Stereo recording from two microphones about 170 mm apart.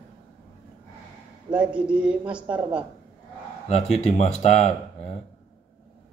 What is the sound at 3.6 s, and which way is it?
Speech, 40° left (ahead or behind).